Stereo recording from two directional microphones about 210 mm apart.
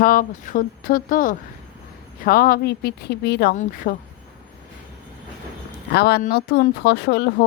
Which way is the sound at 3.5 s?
40° left (ahead or behind).